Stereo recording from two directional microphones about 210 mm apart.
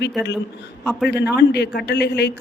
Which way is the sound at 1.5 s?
50° left (ahead or behind).